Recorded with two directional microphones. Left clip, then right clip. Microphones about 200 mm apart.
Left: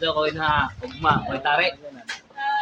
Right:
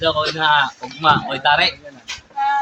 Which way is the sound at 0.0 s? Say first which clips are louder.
Right 5 dB; 35° right (ahead or behind).